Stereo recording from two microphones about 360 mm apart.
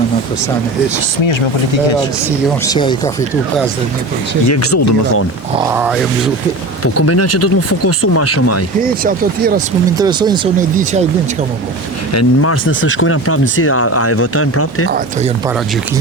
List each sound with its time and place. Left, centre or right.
2.6 s speech: centre
4.4 s speech: left
5.5 s speech: centre
6.8 s speech: left
10.0 s speech: centre
12.1 s speech: left
14.8 s speech: right